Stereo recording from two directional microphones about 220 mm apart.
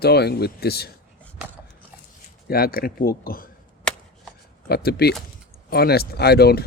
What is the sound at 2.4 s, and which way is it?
Speech, 45° left (ahead or behind).